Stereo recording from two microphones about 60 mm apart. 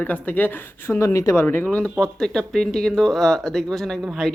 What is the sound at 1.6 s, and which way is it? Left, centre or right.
Speech, left.